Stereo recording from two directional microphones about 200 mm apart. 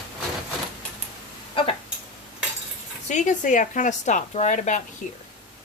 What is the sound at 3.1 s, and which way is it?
A woman's voice, 40° left (ahead or behind).